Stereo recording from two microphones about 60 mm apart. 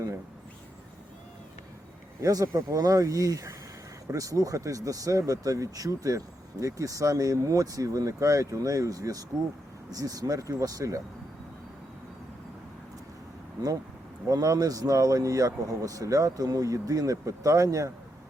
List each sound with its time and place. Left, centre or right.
2.2 s speech: right
14.3 s speech: right